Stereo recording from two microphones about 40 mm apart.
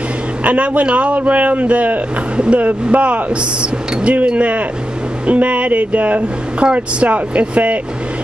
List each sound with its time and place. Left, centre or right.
0.4 s a man's voice: right